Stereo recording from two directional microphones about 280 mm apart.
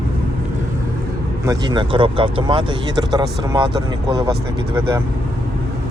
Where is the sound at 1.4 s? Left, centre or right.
Centre.